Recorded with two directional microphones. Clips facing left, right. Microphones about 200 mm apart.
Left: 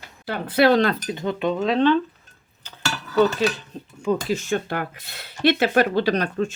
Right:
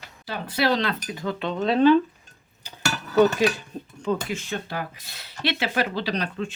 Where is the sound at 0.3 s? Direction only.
55° left (ahead or behind).